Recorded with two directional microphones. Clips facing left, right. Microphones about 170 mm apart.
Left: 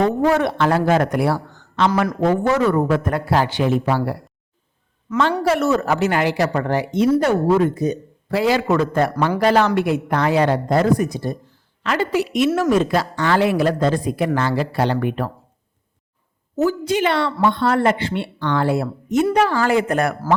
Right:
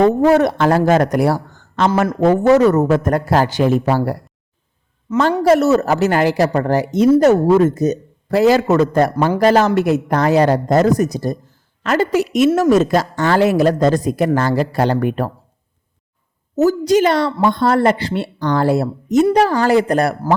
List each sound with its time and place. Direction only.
0.3 s speech: 40° right (ahead or behind)
5.4 s speech: 40° right (ahead or behind)
16.6 s speech: 40° right (ahead or behind)